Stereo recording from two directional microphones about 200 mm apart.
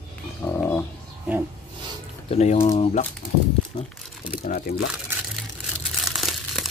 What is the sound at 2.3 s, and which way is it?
Speech, 30° left (ahead or behind).